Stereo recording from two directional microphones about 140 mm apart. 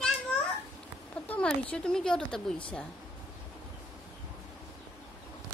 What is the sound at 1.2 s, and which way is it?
A woman's voice, 10° left (ahead or behind).